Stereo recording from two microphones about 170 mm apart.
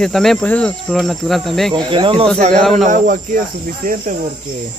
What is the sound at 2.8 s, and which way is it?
Speech, 50° right (ahead or behind).